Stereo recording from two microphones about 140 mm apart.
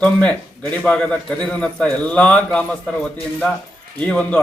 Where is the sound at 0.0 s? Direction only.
10° left (ahead or behind).